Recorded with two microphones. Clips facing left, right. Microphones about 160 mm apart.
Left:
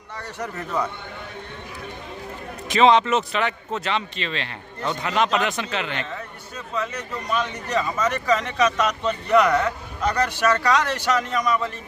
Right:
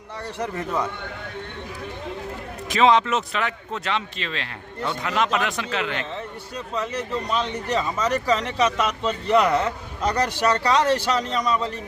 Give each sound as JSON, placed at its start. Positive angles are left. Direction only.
{"t": 2.6, "sound": "speech", "side_deg": 0}
{"t": 6.7, "sound": "a man's voice", "side_deg": -30}